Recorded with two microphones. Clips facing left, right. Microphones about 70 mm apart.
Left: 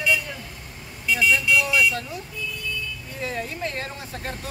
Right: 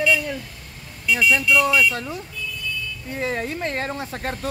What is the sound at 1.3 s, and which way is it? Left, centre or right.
Speech, right.